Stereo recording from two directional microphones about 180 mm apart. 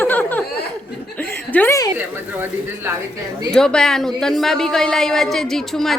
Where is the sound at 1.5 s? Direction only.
10° left (ahead or behind).